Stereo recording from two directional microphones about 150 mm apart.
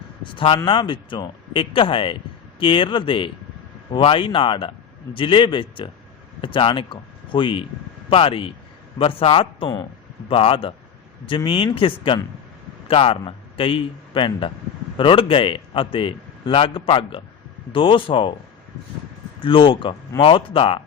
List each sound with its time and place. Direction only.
0.2 s a man's voice: 35° left (ahead or behind)
19.4 s a man's voice: 35° left (ahead or behind)